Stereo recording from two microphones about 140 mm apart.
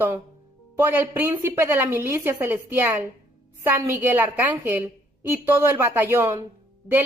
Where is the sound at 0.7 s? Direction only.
15° right (ahead or behind).